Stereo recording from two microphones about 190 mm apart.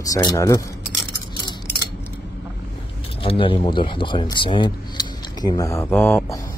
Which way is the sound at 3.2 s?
30° left (ahead or behind).